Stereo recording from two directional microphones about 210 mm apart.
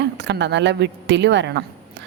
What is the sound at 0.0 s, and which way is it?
A woman's voice, 55° right (ahead or behind).